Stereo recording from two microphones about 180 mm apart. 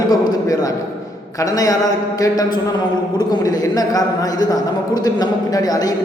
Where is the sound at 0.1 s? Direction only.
20° left (ahead or behind).